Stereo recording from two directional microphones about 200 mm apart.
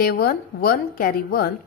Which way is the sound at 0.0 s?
50° left (ahead or behind).